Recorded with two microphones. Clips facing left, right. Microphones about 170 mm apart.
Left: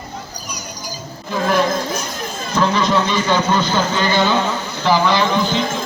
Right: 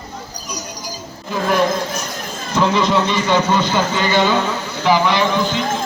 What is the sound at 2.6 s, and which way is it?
A man's voice, 20° right (ahead or behind).